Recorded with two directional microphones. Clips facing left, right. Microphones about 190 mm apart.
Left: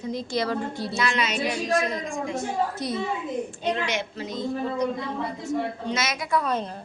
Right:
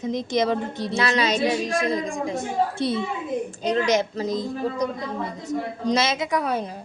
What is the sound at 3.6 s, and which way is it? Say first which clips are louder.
A woman's voice: right 8 dB; 40° right (ahead or behind).